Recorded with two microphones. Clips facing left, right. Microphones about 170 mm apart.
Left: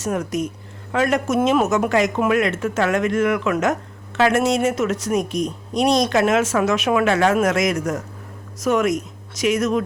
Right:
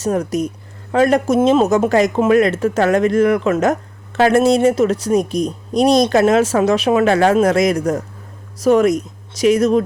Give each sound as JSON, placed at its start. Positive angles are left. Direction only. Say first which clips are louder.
{"t": 0.0, "sound": "speech", "louder": "right 5 dB", "side_deg": -35}